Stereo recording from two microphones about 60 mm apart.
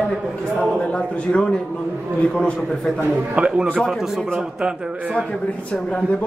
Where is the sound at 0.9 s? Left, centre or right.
Centre.